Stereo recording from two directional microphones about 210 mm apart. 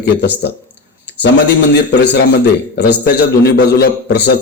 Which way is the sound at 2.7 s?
50° left (ahead or behind).